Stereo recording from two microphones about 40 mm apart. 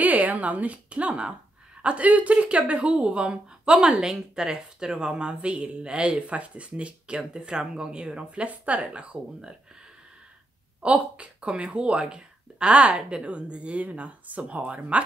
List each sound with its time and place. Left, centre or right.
0.0 s speech: right
2.0 s speech: right
7.2 s speech: centre
8.5 s speech: right
8.9 s speech: right
10.8 s speech: right